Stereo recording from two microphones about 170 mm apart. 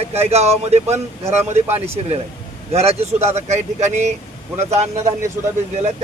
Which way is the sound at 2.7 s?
40° right (ahead or behind).